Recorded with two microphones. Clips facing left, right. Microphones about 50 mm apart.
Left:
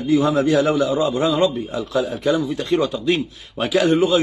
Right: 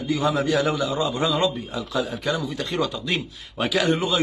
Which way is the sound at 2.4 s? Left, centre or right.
Centre.